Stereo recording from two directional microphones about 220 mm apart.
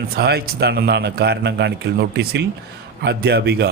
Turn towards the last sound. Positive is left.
turn(degrees=-45)  # may be behind; listen again after turning